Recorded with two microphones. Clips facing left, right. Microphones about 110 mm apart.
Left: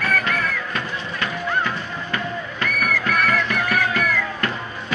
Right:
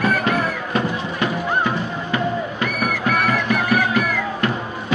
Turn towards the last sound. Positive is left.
turn(degrees=-20)  # may be behind; listen again after turning